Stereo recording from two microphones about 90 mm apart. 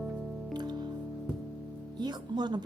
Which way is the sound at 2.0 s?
55° right (ahead or behind).